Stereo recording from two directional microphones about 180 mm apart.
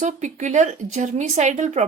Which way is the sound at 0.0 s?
40° right (ahead or behind).